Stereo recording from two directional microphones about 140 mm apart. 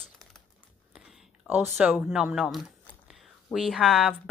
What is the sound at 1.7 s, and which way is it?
Speech, 5° right (ahead or behind).